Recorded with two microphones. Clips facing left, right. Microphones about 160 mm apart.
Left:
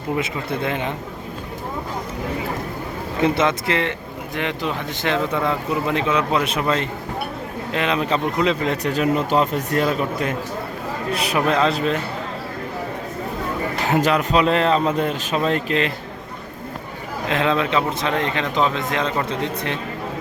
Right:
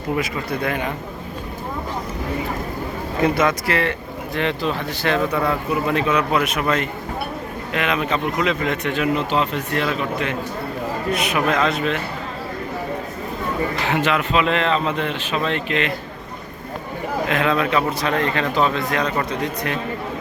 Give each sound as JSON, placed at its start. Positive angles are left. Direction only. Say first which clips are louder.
{"t": 0.2, "sound": "speech", "louder": "even", "side_deg": 25}
{"t": 3.2, "sound": "speech", "louder": "even", "side_deg": 25}
{"t": 13.8, "sound": "speech", "louder": "left 4 dB", "side_deg": 40}
{"t": 17.2, "sound": "speech", "louder": "left 1 dB", "side_deg": 30}